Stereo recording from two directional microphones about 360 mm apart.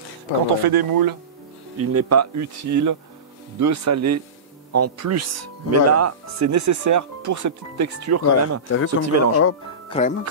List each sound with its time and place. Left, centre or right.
0.5 s speech: right
1.8 s speech: right
8.6 s speech: left
9.0 s speech: right
9.8 s speech: centre